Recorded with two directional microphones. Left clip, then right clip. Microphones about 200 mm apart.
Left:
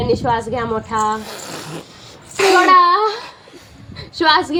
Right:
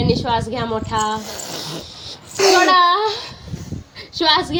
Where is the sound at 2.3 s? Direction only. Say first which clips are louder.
Left 1 dB; 5° right (ahead or behind).